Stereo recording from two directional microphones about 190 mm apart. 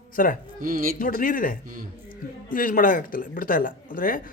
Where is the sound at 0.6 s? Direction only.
45° right (ahead or behind).